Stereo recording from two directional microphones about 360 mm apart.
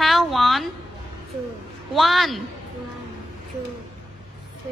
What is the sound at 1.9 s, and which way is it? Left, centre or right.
Speech, centre.